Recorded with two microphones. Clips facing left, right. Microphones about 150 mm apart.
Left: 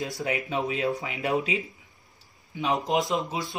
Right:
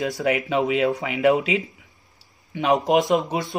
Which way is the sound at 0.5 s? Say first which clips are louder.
Right 6 dB; 90° right.